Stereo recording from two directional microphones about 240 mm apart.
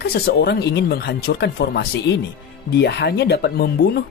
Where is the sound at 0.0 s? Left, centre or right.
Left.